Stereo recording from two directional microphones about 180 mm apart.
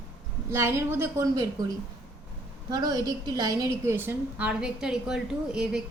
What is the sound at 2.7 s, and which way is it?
A woman's voice, 20° right (ahead or behind).